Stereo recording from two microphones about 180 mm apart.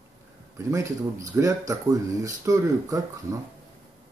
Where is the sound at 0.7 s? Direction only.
20° right (ahead or behind).